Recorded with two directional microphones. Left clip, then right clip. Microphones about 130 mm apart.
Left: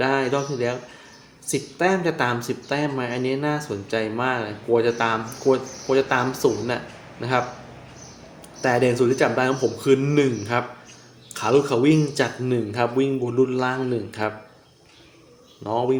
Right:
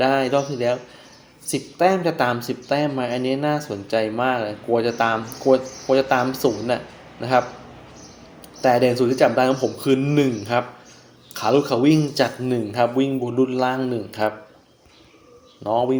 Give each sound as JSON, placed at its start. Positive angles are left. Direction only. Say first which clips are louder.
{"t": 0.0, "sound": "speech", "louder": "right 3 dB", "side_deg": -20}
{"t": 8.6, "sound": "speech", "louder": "right 2 dB", "side_deg": -20}
{"t": 15.6, "sound": "speech", "louder": "right 2 dB", "side_deg": -20}